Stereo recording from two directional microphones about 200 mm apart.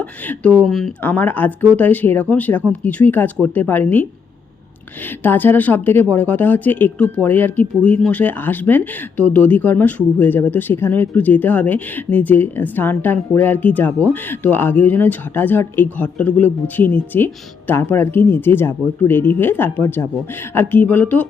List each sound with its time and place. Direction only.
0.0 s speech: 5° left (ahead or behind)
5.2 s speech: 10° left (ahead or behind)